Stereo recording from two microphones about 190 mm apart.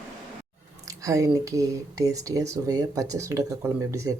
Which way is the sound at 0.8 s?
15° right (ahead or behind).